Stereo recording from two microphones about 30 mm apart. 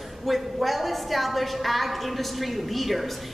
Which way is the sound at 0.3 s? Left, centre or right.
Centre.